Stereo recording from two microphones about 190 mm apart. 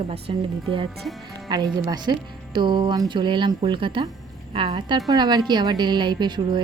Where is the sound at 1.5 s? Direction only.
20° right (ahead or behind).